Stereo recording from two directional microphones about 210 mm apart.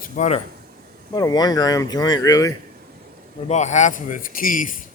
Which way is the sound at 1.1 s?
20° left (ahead or behind).